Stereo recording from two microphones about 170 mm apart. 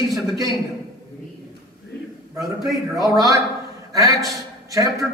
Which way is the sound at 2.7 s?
20° right (ahead or behind).